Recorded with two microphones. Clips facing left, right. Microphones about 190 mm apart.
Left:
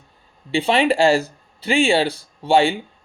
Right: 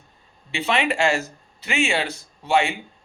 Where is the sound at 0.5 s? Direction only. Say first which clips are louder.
Left 6 dB; 30° left (ahead or behind).